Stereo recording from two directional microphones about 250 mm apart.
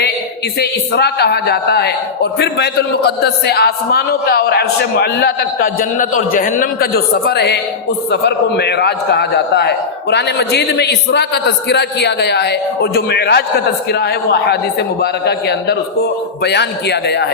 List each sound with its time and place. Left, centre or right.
0.6 s a man's voice: left